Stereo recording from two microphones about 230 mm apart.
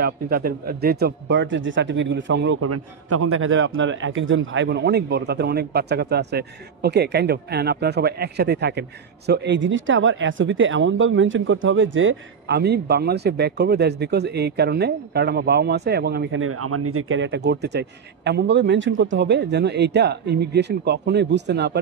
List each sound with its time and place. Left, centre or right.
0.0 s speech: right
16.3 s speech: right